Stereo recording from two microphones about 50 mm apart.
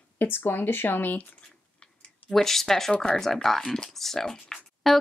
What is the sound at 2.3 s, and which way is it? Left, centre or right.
A woman's voice, centre.